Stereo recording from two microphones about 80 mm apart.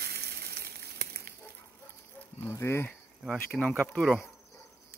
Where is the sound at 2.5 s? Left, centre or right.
Left.